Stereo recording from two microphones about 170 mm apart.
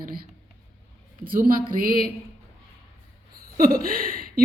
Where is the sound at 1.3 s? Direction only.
55° right (ahead or behind).